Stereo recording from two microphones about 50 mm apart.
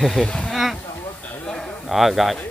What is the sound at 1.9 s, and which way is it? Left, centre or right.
Speech, centre.